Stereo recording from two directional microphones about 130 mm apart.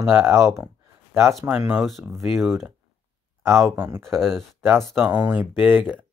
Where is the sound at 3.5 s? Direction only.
20° right (ahead or behind).